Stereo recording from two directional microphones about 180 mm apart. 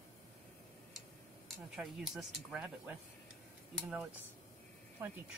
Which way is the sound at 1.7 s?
5° right (ahead or behind).